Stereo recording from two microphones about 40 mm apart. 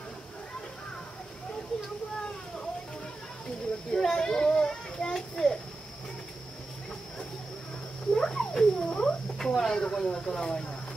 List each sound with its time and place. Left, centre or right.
3.9 s children playing: centre
8.1 s frog: centre
9.8 s speech: centre